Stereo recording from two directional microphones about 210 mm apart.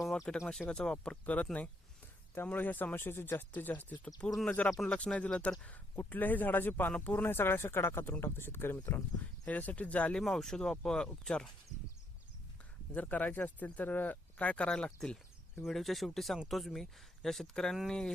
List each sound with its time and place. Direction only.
0.0 s speech: centre (ahead or behind)
12.9 s speech: 5° left (ahead or behind)